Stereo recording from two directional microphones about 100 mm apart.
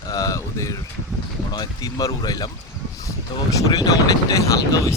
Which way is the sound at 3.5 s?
40° left (ahead or behind).